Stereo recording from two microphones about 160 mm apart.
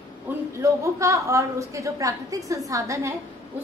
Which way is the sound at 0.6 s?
20° right (ahead or behind).